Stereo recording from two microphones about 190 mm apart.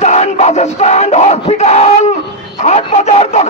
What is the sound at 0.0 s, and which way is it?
Crowd, 35° left (ahead or behind).